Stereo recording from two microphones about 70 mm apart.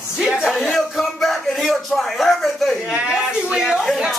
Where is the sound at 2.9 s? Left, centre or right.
Centre.